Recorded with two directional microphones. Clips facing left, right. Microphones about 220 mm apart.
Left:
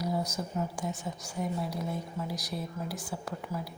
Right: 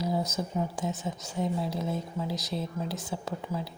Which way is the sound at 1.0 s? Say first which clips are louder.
Right 3 dB; 25° right (ahead or behind).